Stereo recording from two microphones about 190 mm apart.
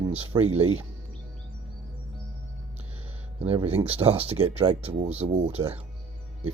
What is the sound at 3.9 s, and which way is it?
Speech, 30° right (ahead or behind).